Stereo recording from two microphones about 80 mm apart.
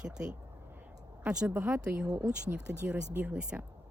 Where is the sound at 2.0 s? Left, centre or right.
Right.